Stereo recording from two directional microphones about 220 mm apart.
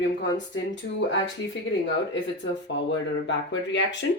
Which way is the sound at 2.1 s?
55° left (ahead or behind).